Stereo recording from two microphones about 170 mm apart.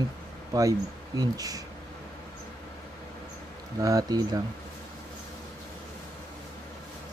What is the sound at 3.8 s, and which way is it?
Speech, 20° right (ahead or behind).